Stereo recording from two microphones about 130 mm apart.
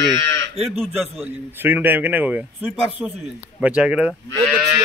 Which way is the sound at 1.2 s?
15° right (ahead or behind).